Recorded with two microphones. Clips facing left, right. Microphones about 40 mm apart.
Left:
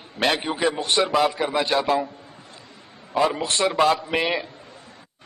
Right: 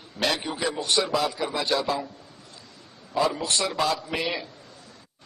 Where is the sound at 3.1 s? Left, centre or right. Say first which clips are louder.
Left 3 dB; left.